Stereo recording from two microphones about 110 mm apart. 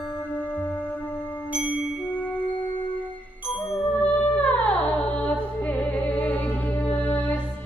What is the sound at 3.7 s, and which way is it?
Music, 5° left (ahead or behind).